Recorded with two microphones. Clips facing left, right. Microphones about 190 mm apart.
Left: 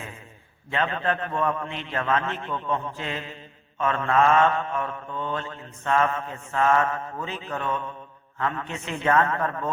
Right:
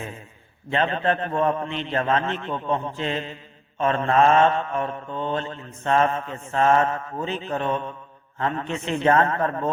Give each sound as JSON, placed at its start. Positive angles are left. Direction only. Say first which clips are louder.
{"t": 0.7, "sound": "mantra", "louder": "right 3 dB", "side_deg": -25}